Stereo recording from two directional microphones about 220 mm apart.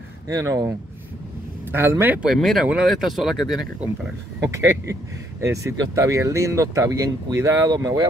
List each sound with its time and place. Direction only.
0.3 s speech: 15° right (ahead or behind)
2.2 s speech: centre (ahead or behind)
4.4 s speech: 15° right (ahead or behind)